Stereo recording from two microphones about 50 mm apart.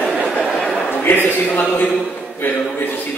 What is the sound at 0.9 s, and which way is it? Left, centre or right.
A man's voice, left.